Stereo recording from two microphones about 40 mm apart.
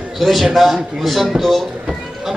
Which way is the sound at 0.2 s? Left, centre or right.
Centre.